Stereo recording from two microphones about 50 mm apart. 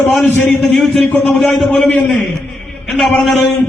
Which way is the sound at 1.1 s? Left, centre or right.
Left.